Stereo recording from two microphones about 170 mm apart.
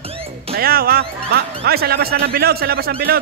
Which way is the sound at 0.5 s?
65° right (ahead or behind).